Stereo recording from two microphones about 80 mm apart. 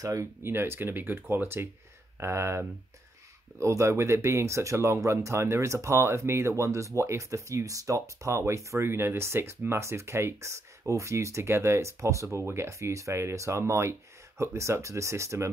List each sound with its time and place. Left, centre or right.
0.0 s speech: right
0.4 s speech: right